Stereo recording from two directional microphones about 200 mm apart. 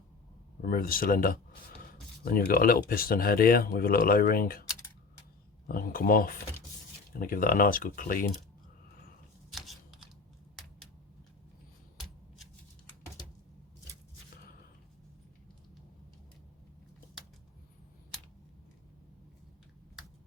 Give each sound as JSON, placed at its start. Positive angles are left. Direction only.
{"t": 0.6, "sound": "speech", "side_deg": 45}
{"t": 5.6, "sound": "speech", "side_deg": 45}
{"t": 9.5, "sound": "scissors", "side_deg": 0}